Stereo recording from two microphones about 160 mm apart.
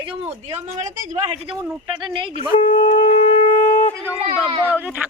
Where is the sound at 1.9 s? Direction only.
30° right (ahead or behind).